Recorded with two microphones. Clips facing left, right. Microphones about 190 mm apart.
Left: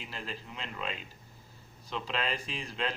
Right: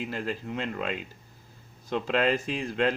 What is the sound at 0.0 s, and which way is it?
Speech, 50° right (ahead or behind).